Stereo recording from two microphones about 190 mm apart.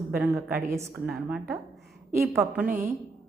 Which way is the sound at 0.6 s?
15° right (ahead or behind).